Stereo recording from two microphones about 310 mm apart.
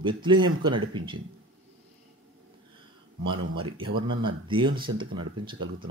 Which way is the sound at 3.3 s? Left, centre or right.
Centre.